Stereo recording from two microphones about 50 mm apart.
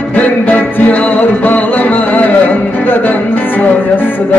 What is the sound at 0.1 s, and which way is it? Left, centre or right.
Music, left.